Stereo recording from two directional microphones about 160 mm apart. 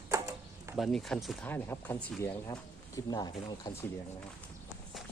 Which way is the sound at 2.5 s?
25° left (ahead or behind).